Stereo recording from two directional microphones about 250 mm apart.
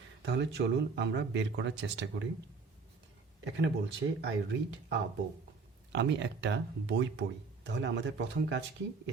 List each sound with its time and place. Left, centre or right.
0.2 s speech: right
3.4 s speech: right